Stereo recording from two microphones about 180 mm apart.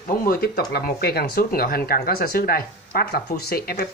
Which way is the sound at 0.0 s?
50° left (ahead or behind).